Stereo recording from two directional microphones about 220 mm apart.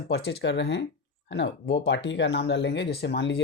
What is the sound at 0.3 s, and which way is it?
Speech, 50° left (ahead or behind).